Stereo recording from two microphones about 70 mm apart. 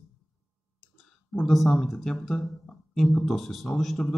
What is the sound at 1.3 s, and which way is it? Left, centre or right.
Speech, centre.